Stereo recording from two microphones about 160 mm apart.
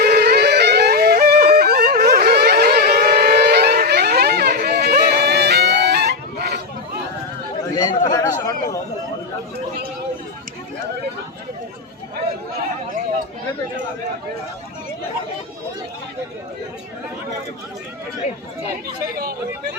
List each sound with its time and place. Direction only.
0.0 s music: 90° right
7.8 s chatter: 25° left (ahead or behind)
18.9 s chatter: 75° right (ahead or behind)